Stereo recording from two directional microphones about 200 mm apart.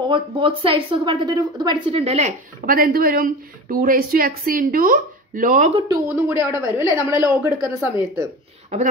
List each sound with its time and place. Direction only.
0.1 s speech: 25° right (ahead or behind)
2.6 s a woman's voice: 45° right (ahead or behind)
5.9 s a woman's voice: 15° right (ahead or behind)